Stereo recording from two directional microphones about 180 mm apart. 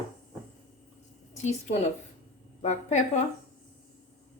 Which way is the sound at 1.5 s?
40° left (ahead or behind).